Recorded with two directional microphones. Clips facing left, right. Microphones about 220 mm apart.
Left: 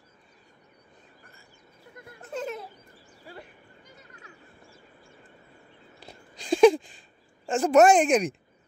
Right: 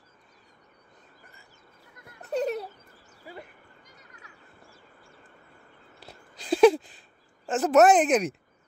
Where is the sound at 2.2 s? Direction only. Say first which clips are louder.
Right 6 dB; 40° right (ahead or behind).